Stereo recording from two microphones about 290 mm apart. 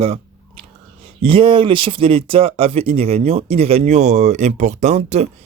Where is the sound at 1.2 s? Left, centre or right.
Centre.